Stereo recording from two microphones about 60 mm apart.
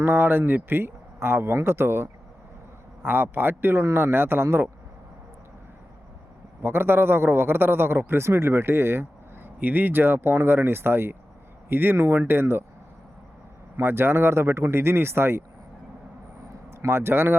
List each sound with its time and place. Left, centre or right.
0.0 s a man's voice: right
6.6 s a man's voice: right
9.6 s a man's voice: right
13.7 s speech: right
16.7 s speech: right